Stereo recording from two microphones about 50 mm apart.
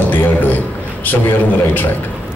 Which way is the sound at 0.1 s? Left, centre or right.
Left.